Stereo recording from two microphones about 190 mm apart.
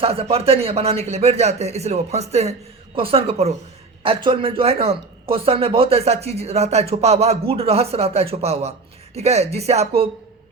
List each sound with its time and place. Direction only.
0.0 s a man's voice: 30° right (ahead or behind)